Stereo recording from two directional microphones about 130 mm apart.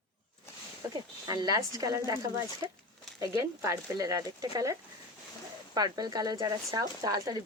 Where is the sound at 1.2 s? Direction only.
30° right (ahead or behind).